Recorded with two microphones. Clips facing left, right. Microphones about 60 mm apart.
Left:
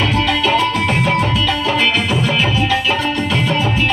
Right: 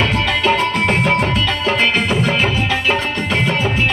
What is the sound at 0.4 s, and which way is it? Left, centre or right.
Music, right.